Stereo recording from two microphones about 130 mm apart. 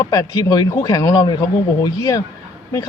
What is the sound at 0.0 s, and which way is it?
Speech, 30° left (ahead or behind).